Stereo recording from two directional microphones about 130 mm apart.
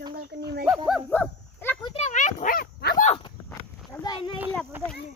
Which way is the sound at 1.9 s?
65° left (ahead or behind).